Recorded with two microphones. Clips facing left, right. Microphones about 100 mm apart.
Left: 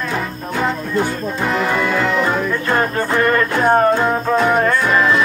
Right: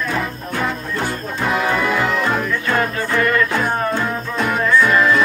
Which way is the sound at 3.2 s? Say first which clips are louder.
Left 1 dB; 40° left (ahead or behind).